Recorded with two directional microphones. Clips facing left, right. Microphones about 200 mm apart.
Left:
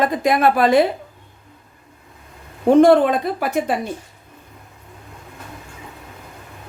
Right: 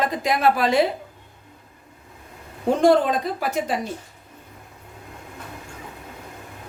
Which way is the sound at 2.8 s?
60° left (ahead or behind).